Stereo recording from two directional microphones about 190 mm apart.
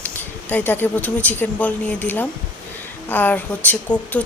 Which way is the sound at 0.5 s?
10° left (ahead or behind).